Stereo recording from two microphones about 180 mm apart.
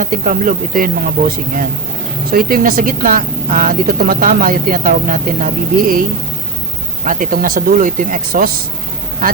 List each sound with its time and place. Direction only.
0.0 s a woman's voice: 50° right (ahead or behind)
2.3 s a woman's voice: 55° right (ahead or behind)
7.0 s a woman's voice: 50° right (ahead or behind)